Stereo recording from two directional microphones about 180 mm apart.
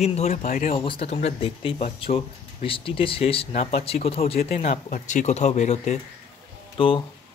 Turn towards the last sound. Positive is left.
turn(degrees=30)  # may be behind; listen again after turning